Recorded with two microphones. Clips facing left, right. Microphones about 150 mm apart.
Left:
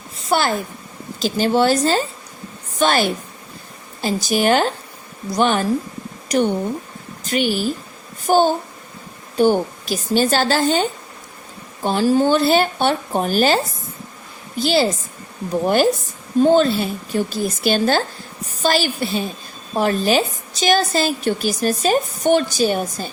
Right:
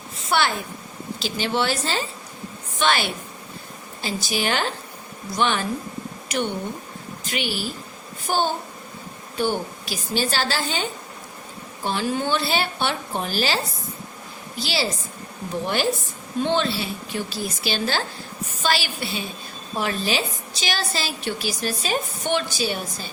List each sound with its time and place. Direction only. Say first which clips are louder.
0.3 s a woman's voice: left 4 dB; 40° left (ahead or behind)
14.6 s a woman's voice: left 9 dB; 50° left (ahead or behind)